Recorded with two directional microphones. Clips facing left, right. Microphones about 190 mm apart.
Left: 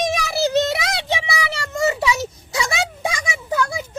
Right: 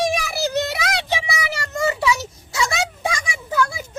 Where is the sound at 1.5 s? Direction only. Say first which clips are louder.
Left 1 dB; 25° left (ahead or behind).